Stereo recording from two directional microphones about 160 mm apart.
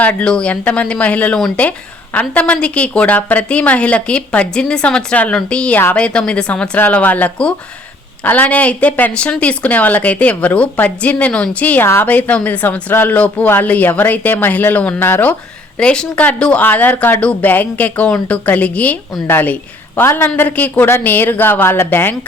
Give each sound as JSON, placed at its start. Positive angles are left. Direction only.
{"t": 0.0, "sound": "a woman's voice", "side_deg": 10}